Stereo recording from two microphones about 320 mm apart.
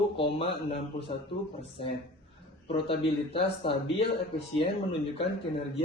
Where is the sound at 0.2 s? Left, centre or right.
Centre.